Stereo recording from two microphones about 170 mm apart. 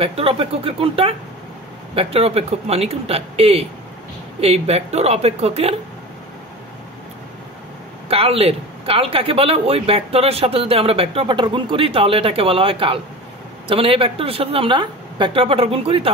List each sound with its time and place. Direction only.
0.0 s speech: 35° right (ahead or behind)
8.1 s speech: 35° right (ahead or behind)